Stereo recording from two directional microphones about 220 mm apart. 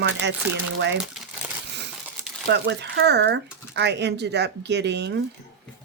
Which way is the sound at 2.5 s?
50° right (ahead or behind).